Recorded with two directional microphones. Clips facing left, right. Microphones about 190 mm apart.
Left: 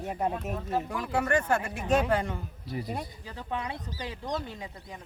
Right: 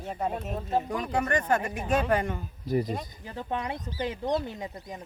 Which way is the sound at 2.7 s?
45° right (ahead or behind).